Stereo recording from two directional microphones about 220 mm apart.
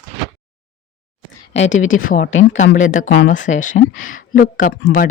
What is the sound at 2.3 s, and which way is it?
Speech, 60° left (ahead or behind).